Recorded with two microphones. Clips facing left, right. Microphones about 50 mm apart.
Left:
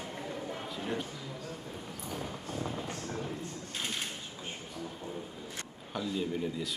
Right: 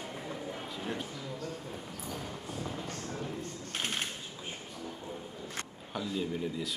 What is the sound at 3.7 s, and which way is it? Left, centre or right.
Typewriter, right.